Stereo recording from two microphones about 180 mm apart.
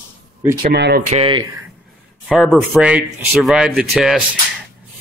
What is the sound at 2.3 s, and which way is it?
Speech, centre (ahead or behind).